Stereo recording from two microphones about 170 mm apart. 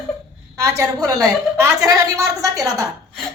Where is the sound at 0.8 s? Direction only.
20° right (ahead or behind).